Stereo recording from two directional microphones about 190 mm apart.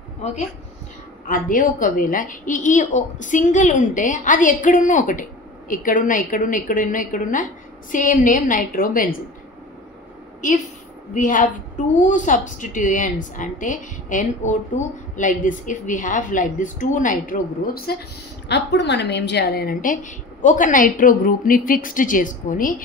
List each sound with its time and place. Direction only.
1.2 s a woman's voice: 45° left (ahead or behind)
11.1 s a woman's voice: 45° left (ahead or behind)
18.5 s a woman's voice: 65° left (ahead or behind); by 22.8 s 45° left (ahead or behind)